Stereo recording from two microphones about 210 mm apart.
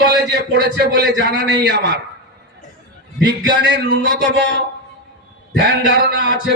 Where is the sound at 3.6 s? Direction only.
50° right (ahead or behind).